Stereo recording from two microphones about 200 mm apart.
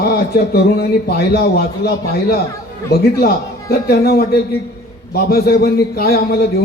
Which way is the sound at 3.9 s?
55° left (ahead or behind).